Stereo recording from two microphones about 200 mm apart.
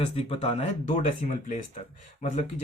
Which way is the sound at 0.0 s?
30° left (ahead or behind).